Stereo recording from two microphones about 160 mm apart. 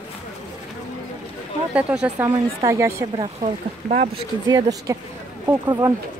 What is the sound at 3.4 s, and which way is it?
Speech, 20° right (ahead or behind).